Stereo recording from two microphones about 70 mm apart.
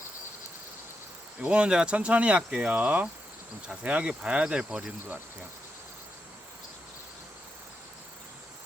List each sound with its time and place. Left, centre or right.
1.4 s speech: centre